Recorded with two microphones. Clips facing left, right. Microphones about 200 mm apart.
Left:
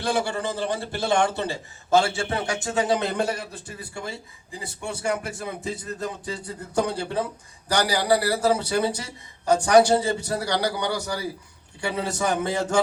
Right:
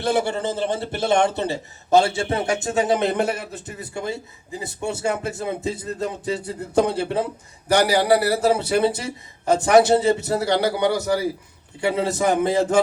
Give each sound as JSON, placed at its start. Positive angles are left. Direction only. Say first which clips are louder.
{"t": 0.0, "sound": "a man's voice", "louder": "right 4 dB", "side_deg": -25}